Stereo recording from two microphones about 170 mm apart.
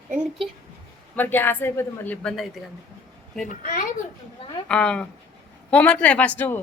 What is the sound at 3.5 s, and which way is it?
Speech, 55° left (ahead or behind).